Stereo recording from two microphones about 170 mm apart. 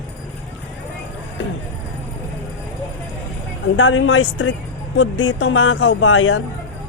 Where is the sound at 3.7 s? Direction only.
90° left.